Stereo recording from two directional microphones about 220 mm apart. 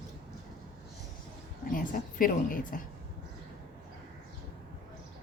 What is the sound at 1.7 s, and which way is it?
A woman's voice, 40° left (ahead or behind).